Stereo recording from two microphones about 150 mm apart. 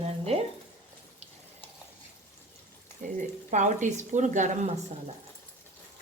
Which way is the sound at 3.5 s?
55° right (ahead or behind).